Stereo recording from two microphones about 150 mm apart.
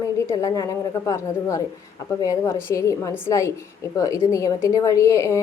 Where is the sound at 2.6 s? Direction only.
20° left (ahead or behind).